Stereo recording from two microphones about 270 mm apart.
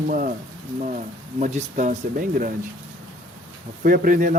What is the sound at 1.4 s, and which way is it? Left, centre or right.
Speech, right.